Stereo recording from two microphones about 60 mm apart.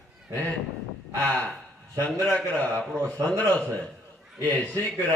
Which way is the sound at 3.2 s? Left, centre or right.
Right.